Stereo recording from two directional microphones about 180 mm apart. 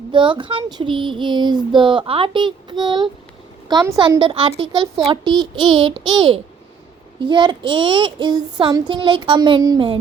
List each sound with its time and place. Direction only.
0.1 s child singing: 25° right (ahead or behind)